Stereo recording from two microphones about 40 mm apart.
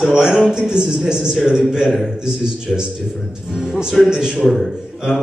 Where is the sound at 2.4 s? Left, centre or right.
Centre.